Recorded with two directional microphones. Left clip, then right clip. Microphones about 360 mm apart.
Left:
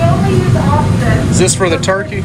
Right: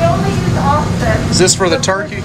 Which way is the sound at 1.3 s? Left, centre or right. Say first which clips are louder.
Right 1 dB; centre.